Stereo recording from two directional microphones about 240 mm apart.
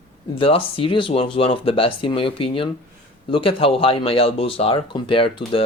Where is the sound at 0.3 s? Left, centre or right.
Left.